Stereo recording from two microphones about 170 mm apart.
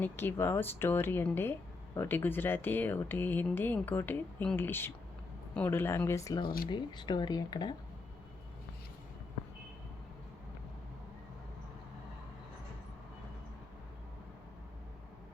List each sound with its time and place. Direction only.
0.0 s speech: 10° left (ahead or behind)